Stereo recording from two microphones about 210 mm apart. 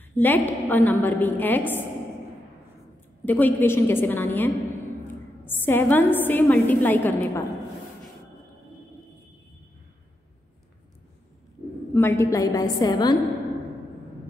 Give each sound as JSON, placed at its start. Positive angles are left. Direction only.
{"t": 0.1, "sound": "a woman's voice", "side_deg": 10}
{"t": 3.3, "sound": "a woman's voice", "side_deg": 10}
{"t": 11.9, "sound": "a woman's voice", "side_deg": 10}